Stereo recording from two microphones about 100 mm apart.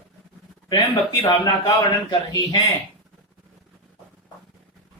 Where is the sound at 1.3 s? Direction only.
45° left (ahead or behind).